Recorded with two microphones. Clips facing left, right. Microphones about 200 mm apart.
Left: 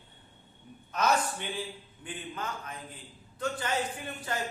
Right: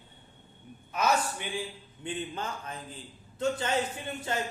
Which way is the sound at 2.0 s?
25° right (ahead or behind).